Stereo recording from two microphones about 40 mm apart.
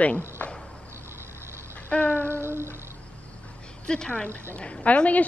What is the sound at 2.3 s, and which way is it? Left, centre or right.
Child singing, right.